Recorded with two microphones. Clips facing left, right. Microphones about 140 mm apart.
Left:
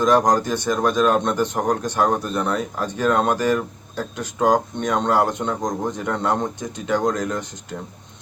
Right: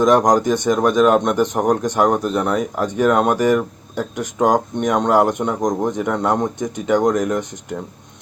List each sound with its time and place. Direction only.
0.0 s speech: 20° right (ahead or behind)